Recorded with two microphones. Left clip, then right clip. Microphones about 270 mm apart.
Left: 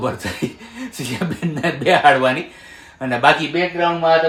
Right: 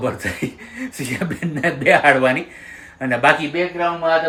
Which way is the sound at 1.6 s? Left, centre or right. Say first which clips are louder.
Even; centre.